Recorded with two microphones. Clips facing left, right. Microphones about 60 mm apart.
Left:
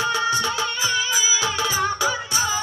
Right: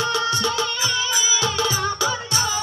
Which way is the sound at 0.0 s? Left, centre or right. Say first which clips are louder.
Even; centre.